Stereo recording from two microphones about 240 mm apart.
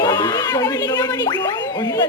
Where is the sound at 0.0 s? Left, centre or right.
Centre.